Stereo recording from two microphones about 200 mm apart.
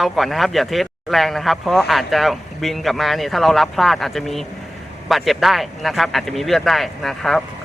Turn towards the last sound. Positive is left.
turn(degrees=0)  # may be behind; listen again after turning